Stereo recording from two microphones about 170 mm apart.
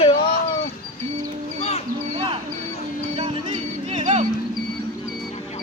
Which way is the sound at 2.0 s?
35° right (ahead or behind).